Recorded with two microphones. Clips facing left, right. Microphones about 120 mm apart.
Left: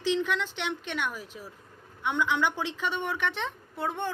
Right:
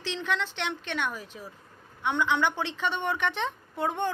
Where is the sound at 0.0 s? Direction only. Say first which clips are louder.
Left 3 dB; 10° left (ahead or behind).